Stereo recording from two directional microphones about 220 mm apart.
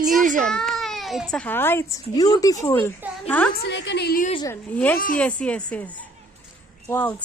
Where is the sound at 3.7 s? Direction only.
50° left (ahead or behind).